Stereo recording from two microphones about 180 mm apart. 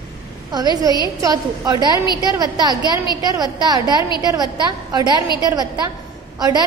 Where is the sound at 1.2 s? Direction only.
20° right (ahead or behind).